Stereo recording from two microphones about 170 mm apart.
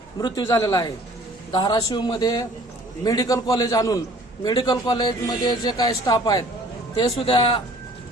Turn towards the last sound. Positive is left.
turn(degrees=30)  # may be behind; listen again after turning